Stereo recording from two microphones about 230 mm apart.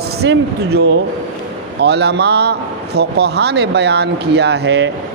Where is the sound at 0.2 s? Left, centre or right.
Right.